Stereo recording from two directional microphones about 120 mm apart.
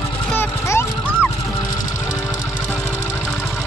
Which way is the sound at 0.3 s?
20° left (ahead or behind).